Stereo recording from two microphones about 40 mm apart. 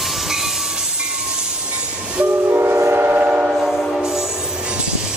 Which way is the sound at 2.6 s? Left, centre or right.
Right.